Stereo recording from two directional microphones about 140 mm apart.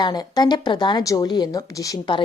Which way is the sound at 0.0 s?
30° left (ahead or behind).